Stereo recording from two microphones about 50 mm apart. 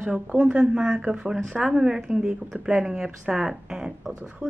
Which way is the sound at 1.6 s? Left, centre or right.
Centre.